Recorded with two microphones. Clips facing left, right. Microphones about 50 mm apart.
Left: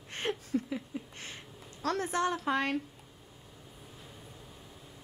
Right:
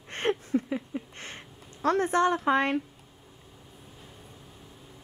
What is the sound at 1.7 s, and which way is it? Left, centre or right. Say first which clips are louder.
A woman's voice: right 7 dB; right.